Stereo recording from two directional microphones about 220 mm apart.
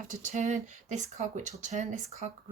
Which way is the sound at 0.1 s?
35° right (ahead or behind).